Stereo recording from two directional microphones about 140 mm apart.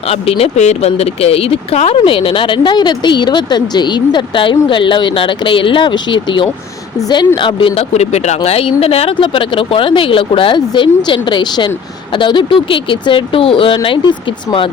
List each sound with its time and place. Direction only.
0.1 s speech: 45° left (ahead or behind)